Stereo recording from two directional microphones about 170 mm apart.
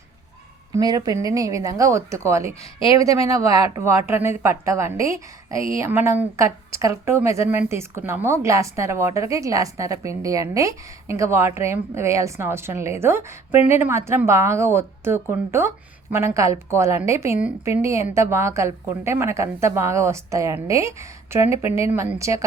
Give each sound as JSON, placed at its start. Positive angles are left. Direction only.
{"t": 0.7, "sound": "a woman's voice", "side_deg": -20}